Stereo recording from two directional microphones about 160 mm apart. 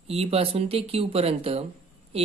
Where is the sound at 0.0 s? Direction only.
40° right (ahead or behind).